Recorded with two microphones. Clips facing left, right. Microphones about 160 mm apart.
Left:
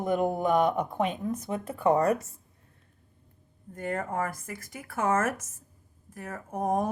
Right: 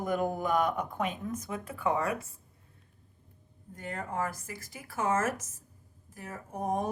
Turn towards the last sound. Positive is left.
turn(degrees=50)  # may be behind; listen again after turning